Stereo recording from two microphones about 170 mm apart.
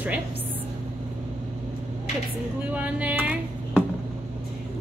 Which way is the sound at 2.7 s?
10° right (ahead or behind).